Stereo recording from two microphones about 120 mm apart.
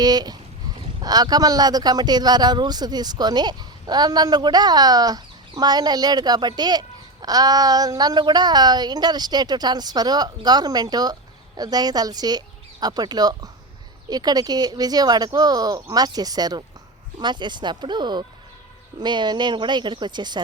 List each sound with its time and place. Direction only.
0.0 s a man's voice: 35° right (ahead or behind)